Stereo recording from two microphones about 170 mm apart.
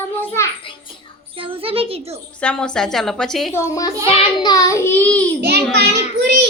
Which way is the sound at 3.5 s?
15° left (ahead or behind).